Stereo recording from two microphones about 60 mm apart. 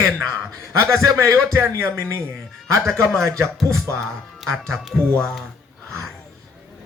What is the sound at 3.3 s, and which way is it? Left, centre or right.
Music, right.